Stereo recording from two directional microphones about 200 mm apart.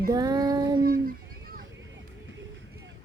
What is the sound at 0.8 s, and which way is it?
Speech, 50° right (ahead or behind).